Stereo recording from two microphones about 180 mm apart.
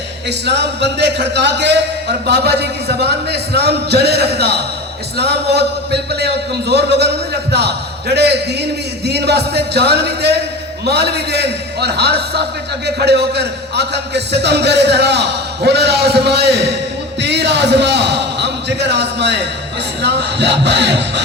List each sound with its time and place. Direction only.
0.3 s a man's voice: 70° right (ahead or behind)